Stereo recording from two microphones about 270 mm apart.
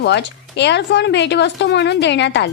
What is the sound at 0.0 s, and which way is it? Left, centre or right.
Speech, left.